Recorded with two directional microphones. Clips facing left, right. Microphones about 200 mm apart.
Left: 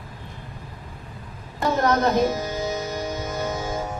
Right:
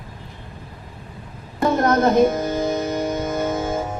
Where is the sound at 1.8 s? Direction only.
50° right (ahead or behind).